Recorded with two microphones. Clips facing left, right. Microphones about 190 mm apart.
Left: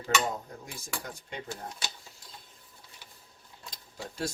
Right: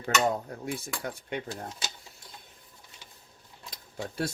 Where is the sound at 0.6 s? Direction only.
60° right (ahead or behind).